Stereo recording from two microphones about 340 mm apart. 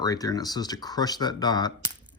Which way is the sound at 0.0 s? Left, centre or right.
Centre.